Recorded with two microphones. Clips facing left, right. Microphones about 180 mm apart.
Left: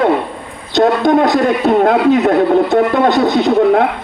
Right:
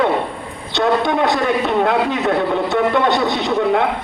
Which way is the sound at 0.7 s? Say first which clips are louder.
Left 6 dB; 40° left (ahead or behind).